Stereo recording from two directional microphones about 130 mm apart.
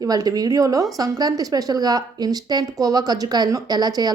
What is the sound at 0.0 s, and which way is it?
Speech, 30° right (ahead or behind).